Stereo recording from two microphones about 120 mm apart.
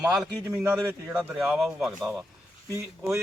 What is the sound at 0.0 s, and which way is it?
Speech, 5° right (ahead or behind).